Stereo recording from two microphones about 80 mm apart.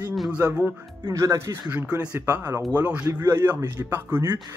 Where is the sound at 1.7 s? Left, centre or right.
Centre.